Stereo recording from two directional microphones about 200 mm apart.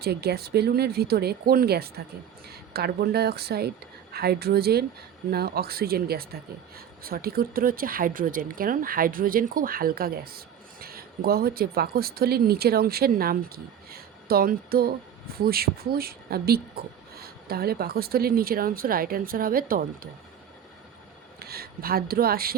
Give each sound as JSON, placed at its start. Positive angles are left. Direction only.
{"t": 0.0, "sound": "speech", "side_deg": -50}
{"t": 21.3, "sound": "speech", "side_deg": -50}